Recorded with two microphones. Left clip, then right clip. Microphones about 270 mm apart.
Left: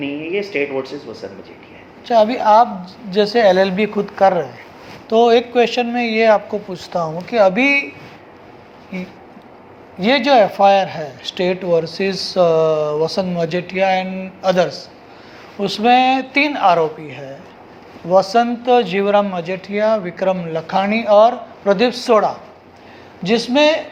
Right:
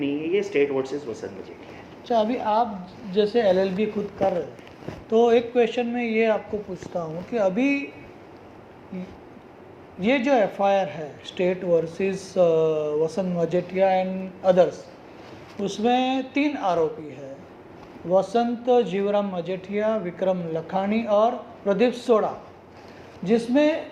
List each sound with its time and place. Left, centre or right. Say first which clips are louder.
0.0 s speech: left 2 dB; centre
2.0 s a man's voice: left 10 dB; left
10.0 s a man's voice: left 8 dB; left
10.9 s a man's voice: left 7 dB; left
12.5 s speech: left 7 dB; left
13.1 s a man's voice: left 5 dB; left
15.8 s a man's voice: left 10 dB; left
18.1 s a man's voice: left 8 dB; left
18.3 s a man's voice: left 7 dB; left